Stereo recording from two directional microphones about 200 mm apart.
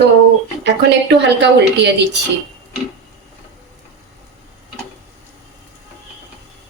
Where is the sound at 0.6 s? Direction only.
60° right (ahead or behind).